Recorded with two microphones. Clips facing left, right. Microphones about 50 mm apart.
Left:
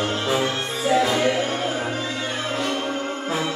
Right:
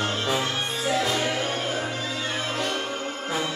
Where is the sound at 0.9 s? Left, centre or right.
Centre.